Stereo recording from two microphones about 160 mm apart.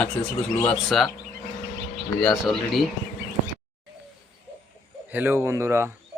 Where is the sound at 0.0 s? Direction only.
5° left (ahead or behind).